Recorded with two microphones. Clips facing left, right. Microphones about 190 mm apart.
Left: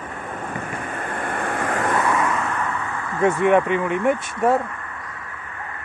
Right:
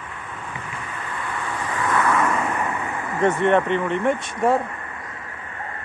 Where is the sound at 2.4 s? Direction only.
15° right (ahead or behind).